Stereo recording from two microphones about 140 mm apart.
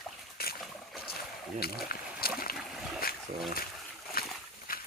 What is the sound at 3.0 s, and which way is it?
Boat, 90° left.